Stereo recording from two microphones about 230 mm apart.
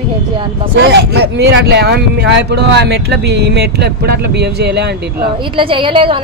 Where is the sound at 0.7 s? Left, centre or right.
Right.